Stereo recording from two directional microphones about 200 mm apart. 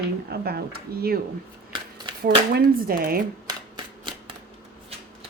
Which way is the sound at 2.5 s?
50° right (ahead or behind).